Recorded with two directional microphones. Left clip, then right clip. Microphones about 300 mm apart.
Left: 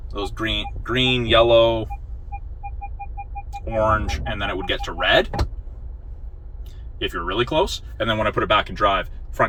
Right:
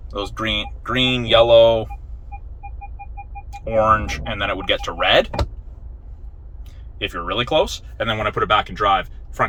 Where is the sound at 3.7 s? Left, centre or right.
Centre.